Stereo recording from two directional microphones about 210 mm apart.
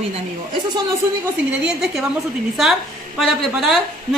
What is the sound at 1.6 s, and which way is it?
Speech, 5° right (ahead or behind).